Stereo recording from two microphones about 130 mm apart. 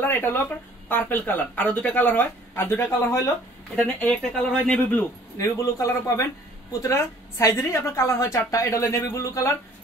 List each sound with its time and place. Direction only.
0.0 s speech: 15° left (ahead or behind)
3.7 s speech: 5° left (ahead or behind)
5.6 s a woman's voice: 25° left (ahead or behind)